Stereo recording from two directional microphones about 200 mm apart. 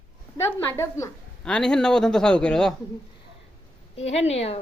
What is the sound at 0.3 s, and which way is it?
Speech, 15° left (ahead or behind).